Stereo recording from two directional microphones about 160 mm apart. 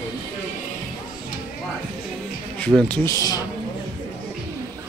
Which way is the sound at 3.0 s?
20° left (ahead or behind).